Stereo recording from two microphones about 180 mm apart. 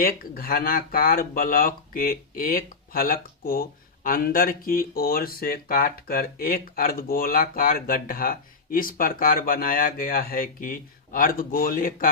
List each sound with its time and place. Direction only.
0.0 s speech: 55° left (ahead or behind)